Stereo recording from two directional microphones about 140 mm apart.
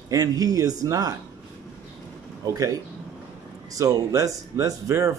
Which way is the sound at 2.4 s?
25° right (ahead or behind).